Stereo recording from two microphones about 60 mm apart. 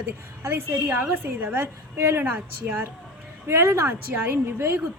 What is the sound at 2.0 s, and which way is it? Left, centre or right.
A woman's voice, right.